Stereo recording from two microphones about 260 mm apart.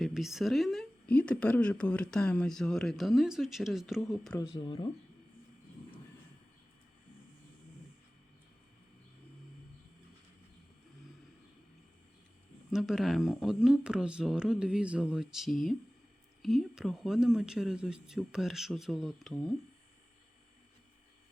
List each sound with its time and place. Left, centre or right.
0.0 s speech: centre
4.5 s speech: centre
12.7 s speech: centre